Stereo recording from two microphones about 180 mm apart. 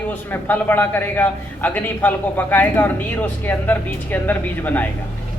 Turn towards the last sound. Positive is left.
turn(degrees=10)  # may be behind; listen again after turning